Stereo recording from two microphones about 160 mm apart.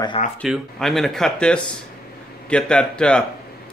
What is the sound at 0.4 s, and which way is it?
Speech, centre (ahead or behind).